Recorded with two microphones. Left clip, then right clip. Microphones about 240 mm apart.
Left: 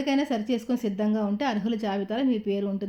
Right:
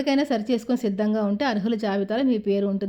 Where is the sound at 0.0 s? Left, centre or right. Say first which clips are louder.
Right 3 dB; right.